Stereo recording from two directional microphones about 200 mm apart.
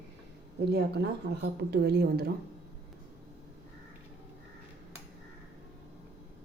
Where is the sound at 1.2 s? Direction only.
55° right (ahead or behind).